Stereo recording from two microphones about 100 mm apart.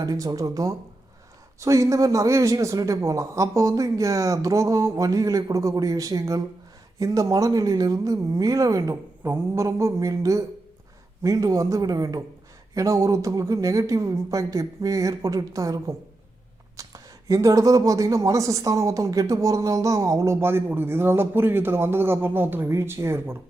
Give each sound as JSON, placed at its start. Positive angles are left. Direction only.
{"t": 0.0, "sound": "speech", "side_deg": -40}